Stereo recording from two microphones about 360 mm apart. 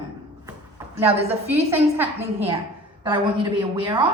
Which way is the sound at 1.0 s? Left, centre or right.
Centre.